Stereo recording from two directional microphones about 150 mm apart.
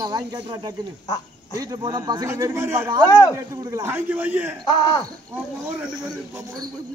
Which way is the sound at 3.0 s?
20° left (ahead or behind).